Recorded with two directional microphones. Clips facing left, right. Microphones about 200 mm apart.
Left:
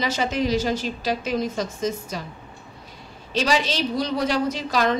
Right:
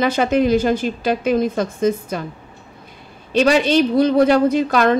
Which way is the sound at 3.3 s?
60° right (ahead or behind).